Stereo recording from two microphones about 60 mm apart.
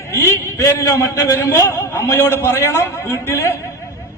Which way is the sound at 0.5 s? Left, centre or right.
Left.